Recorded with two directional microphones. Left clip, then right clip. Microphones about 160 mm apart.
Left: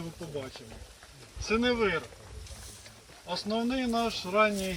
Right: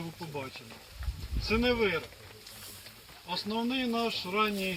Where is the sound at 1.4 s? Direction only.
15° left (ahead or behind).